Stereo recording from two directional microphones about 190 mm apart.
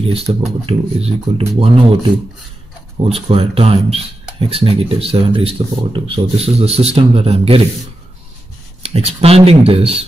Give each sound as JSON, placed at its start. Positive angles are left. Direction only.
{"t": 0.0, "sound": "speech", "side_deg": -30}
{"t": 3.0, "sound": "speech", "side_deg": -30}
{"t": 8.8, "sound": "speech", "side_deg": -30}